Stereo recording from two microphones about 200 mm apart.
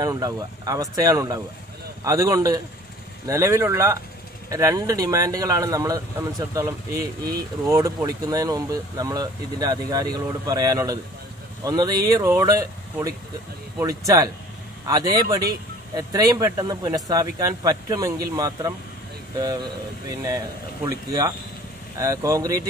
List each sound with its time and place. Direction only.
0.0 s speech: 20° right (ahead or behind)